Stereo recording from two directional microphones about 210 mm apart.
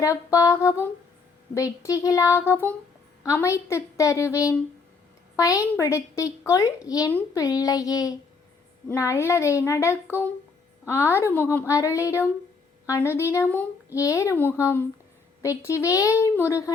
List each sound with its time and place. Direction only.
0.0 s a woman's voice: 15° left (ahead or behind)